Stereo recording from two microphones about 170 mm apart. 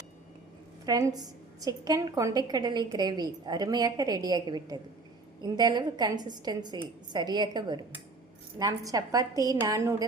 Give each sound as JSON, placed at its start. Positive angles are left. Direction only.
{"t": 0.9, "sound": "a woman's voice", "side_deg": -20}